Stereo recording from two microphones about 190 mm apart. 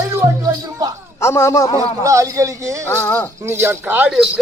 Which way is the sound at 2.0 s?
15° right (ahead or behind).